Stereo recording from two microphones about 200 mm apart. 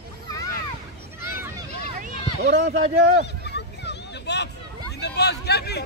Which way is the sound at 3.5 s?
60° left (ahead or behind).